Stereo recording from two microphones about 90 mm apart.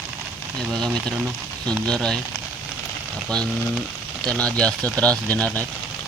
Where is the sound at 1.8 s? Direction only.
10° left (ahead or behind).